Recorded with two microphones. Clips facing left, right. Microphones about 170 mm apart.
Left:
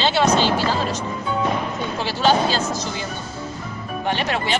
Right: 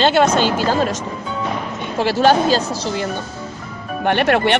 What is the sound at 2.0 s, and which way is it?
Speech, 50° right (ahead or behind).